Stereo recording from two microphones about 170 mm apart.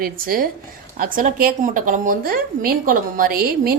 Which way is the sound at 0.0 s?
55° right (ahead or behind).